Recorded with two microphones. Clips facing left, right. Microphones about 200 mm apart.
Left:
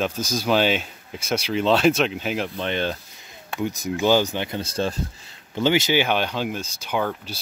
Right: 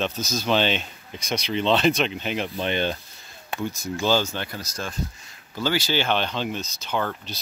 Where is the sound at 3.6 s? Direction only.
15° left (ahead or behind).